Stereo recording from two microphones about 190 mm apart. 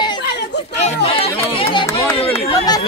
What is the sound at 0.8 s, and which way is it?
Speech, 35° left (ahead or behind).